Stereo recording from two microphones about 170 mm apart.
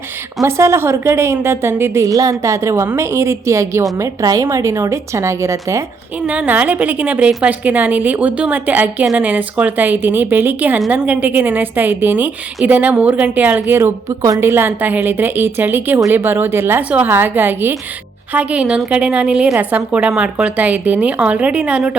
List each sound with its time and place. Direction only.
0.4 s a woman's voice: 15° right (ahead or behind)